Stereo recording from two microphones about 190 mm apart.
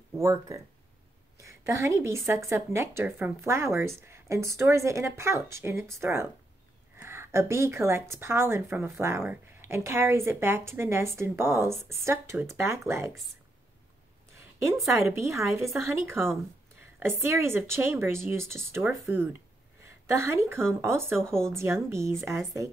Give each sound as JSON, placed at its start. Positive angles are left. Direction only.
{"t": 0.2, "sound": "speech", "side_deg": -15}
{"t": 14.3, "sound": "a sound", "side_deg": -15}
{"t": 14.9, "sound": "a woman's voice", "side_deg": -15}